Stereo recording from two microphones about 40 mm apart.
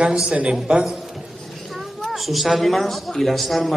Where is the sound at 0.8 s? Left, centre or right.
Centre.